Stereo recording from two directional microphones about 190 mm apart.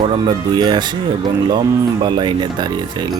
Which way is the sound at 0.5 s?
25° right (ahead or behind).